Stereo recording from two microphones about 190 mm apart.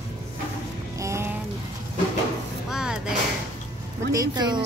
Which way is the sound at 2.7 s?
5° right (ahead or behind).